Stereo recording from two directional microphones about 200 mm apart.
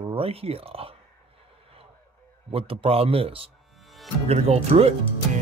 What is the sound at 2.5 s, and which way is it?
A man's voice, 30° right (ahead or behind).